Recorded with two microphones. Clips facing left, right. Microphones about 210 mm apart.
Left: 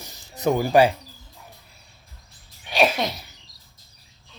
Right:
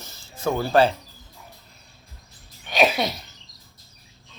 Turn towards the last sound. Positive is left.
turn(degrees=-5)  # may be behind; listen again after turning